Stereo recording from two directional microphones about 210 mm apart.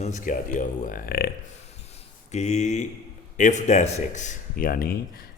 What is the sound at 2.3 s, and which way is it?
A man's voice, 35° left (ahead or behind).